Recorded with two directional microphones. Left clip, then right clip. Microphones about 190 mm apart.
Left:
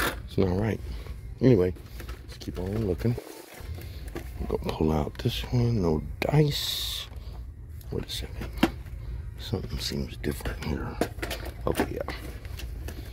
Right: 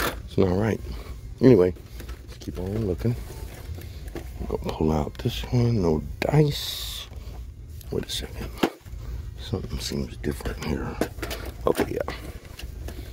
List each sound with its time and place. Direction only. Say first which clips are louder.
0.0 s a sound: right 3 dB; 10° right (ahead or behind)
0.5 s speech: right 4 dB; 25° right (ahead or behind)
2.4 s speech: right 1 dB; 5° right (ahead or behind)
5.5 s speech: right 5 dB; 20° right (ahead or behind)
7.9 s speech: right 5 dB; 35° right (ahead or behind)
9.6 s speech: right 2 dB; 15° right (ahead or behind)
10.6 s speech: right 4 dB; 30° right (ahead or behind)
11.6 s speech: right 5 dB; 40° right (ahead or behind)